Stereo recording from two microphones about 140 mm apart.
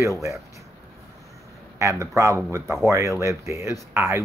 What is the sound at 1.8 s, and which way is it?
Speech, 20° right (ahead or behind).